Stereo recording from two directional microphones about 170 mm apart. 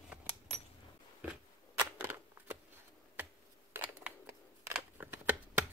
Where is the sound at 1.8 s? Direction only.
15° right (ahead or behind).